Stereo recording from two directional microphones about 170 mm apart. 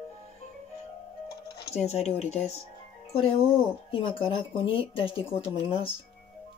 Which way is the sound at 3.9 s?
30° left (ahead or behind).